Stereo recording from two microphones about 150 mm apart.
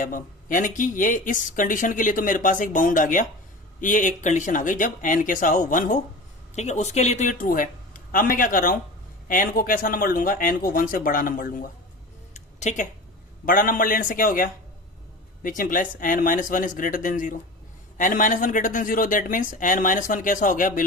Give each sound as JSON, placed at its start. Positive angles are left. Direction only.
{"t": 0.0, "sound": "speech", "side_deg": 60}
{"t": 6.6, "sound": "speech", "side_deg": 50}
{"t": 12.3, "sound": "a sound", "side_deg": 50}
{"t": 13.4, "sound": "speech", "side_deg": 65}